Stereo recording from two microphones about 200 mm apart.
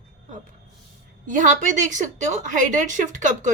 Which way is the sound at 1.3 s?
40° right (ahead or behind).